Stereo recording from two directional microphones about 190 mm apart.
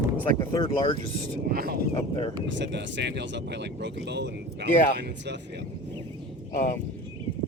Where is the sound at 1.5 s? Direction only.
55° right (ahead or behind).